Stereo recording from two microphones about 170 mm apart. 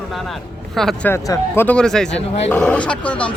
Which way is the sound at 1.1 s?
15° left (ahead or behind).